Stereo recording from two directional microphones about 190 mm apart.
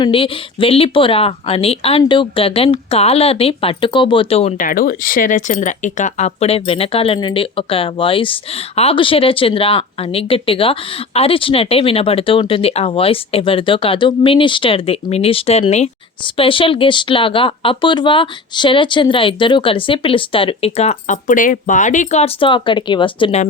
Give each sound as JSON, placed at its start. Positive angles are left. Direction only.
{"t": 0.0, "sound": "speech", "side_deg": 30}
{"t": 4.6, "sound": "speech", "side_deg": 50}